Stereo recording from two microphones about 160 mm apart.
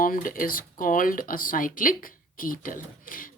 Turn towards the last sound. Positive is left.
turn(degrees=60)  # may be behind; listen again after turning